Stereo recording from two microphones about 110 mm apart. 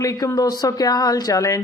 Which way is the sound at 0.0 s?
30° left (ahead or behind).